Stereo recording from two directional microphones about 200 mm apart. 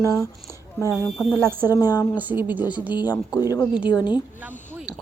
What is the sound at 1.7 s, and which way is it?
Speech, 20° left (ahead or behind).